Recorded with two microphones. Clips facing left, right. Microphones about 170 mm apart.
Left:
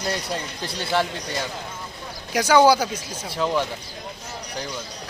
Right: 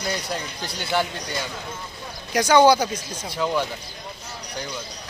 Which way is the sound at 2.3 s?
5° left (ahead or behind).